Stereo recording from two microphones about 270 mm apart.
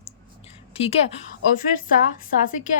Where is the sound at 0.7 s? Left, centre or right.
Left.